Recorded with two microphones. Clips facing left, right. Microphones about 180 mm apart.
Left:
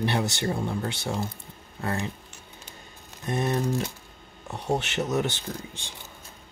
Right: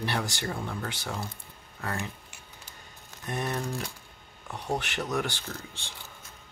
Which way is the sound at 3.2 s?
25° left (ahead or behind).